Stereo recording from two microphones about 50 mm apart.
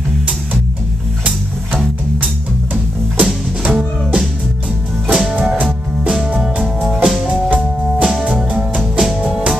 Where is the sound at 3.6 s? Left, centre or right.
Right.